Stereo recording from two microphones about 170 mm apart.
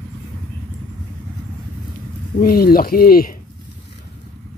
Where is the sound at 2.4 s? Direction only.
60° left (ahead or behind).